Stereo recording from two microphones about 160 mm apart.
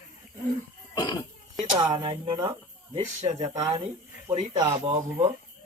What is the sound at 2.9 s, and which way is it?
Speech, 50° right (ahead or behind).